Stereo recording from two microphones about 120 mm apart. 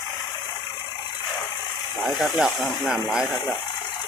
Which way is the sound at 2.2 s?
Centre (ahead or behind).